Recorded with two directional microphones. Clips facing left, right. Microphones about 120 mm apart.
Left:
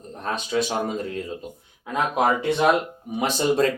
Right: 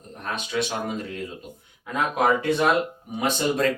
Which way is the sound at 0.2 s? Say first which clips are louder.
Left 3 dB; 30° left (ahead or behind).